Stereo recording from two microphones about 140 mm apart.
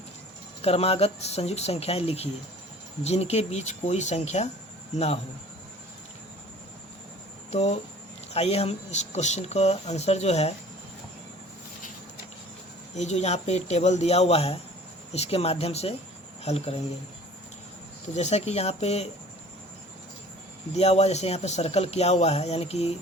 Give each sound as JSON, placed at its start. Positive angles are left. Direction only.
{"t": 0.6, "sound": "speech", "side_deg": 45}
{"t": 7.5, "sound": "speech", "side_deg": 50}
{"t": 13.0, "sound": "speech", "side_deg": 55}
{"t": 18.1, "sound": "speech", "side_deg": 55}
{"t": 20.7, "sound": "speech", "side_deg": 50}